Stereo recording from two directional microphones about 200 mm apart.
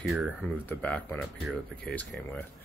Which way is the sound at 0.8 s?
5° left (ahead or behind).